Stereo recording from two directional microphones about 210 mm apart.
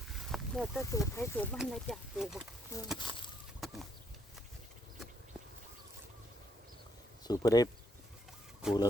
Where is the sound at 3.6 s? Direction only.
Centre (ahead or behind).